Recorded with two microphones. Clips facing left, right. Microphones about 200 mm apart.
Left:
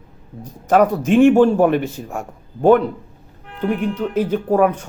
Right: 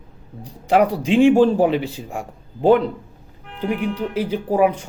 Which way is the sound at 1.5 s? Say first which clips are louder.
Left 2 dB; 55° left (ahead or behind).